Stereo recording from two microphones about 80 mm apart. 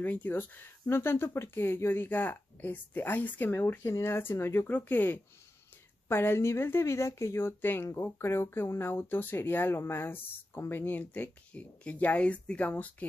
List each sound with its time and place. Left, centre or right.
0.0 s speech: left